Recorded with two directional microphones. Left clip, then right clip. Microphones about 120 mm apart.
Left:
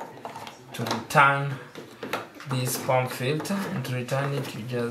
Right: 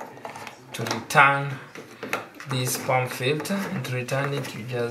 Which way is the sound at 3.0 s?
Centre (ahead or behind).